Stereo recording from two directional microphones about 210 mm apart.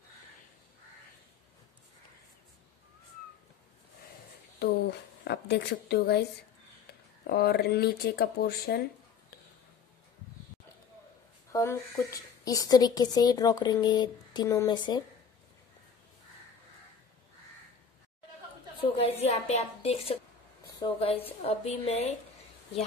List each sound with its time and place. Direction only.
4.6 s speech: 55° left (ahead or behind)
7.2 s speech: 50° left (ahead or behind)
11.5 s a woman's voice: 15° left (ahead or behind)
18.9 s a woman's voice: 30° left (ahead or behind)